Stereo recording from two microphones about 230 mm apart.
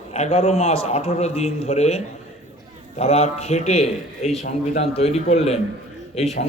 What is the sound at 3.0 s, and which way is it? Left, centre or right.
A man's voice, left.